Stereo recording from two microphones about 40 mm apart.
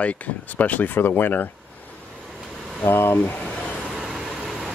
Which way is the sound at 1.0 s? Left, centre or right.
Left.